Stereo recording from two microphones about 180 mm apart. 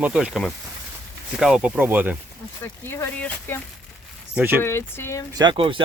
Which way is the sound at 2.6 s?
10° left (ahead or behind).